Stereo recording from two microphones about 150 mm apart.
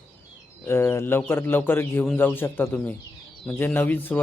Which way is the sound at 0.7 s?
15° left (ahead or behind).